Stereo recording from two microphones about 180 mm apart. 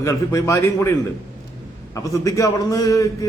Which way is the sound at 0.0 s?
15° left (ahead or behind).